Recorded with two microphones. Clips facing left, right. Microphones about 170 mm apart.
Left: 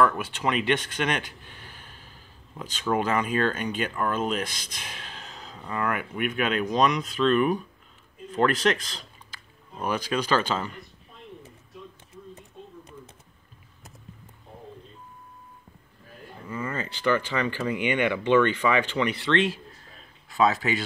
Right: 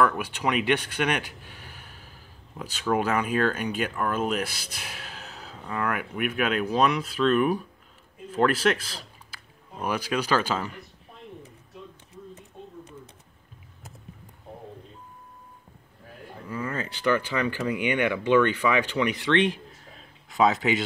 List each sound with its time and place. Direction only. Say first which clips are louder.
0.0 s speech: even; 10° right (ahead or behind)
16.7 s speech: even; 10° right (ahead or behind)